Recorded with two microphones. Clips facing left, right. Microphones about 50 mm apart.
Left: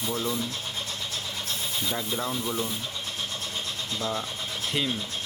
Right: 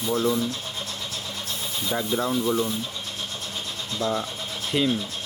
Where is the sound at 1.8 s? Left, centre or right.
Centre.